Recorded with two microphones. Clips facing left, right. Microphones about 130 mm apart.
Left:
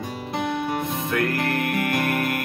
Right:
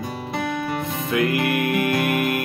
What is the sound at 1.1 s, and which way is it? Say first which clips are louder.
Music: right 4 dB; 10° right (ahead or behind).